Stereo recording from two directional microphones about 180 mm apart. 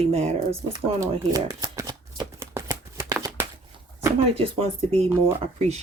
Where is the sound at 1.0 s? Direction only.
20° right (ahead or behind).